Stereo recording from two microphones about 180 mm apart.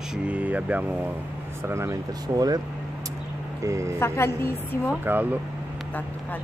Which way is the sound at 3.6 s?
15° right (ahead or behind).